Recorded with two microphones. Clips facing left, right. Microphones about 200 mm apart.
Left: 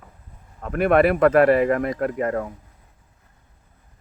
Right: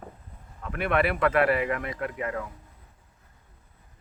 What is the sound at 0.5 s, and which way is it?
Speech, 45° left (ahead or behind).